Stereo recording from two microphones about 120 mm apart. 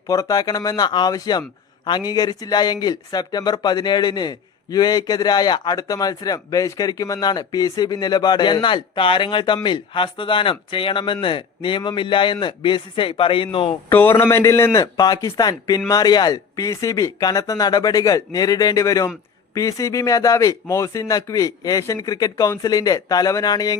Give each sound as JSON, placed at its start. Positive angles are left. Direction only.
{"t": 0.1, "sound": "speech", "side_deg": 30}
{"t": 13.9, "sound": "a man's voice", "side_deg": 20}